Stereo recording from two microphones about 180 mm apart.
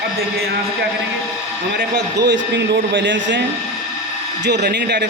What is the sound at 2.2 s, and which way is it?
A man's voice, 75° right (ahead or behind).